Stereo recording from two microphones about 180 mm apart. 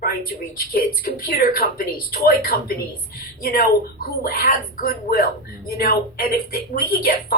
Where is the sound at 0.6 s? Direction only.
60° left (ahead or behind).